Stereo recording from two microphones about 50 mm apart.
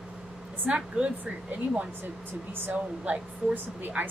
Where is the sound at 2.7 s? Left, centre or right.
Right.